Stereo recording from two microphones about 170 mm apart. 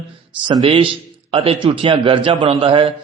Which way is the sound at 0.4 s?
30° right (ahead or behind).